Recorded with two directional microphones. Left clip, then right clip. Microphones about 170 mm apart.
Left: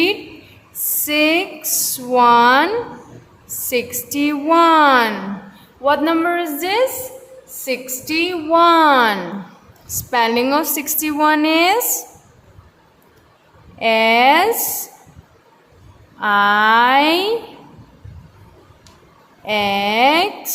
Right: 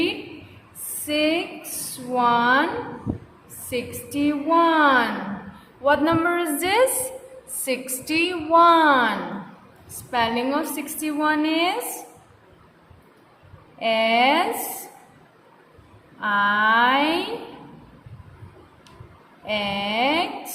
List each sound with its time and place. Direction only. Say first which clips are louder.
1.0 s a sound: left 6 dB; 40° left (ahead or behind)
3.7 s a woman's voice: left 8 dB; 40° left (ahead or behind)
5.8 s a woman's voice: left 4 dB; 30° left (ahead or behind)
13.7 s a woman's voice: left 6 dB; 35° left (ahead or behind)
16.2 s a woman's voice: left 6 dB; 40° left (ahead or behind)
19.5 s a woman's voice: left 8 dB; 40° left (ahead or behind)